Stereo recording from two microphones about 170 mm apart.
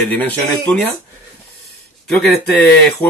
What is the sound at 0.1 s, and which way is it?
Speech, 10° left (ahead or behind).